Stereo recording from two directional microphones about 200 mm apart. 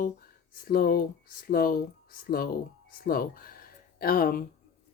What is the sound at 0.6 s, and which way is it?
Speech, 50° left (ahead or behind).